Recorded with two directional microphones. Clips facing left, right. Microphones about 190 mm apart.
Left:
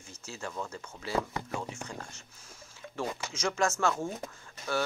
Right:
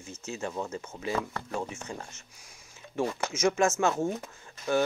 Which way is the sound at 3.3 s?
20° right (ahead or behind).